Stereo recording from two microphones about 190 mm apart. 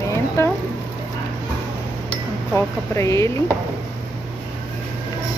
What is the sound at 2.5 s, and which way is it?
Speech, 15° left (ahead or behind).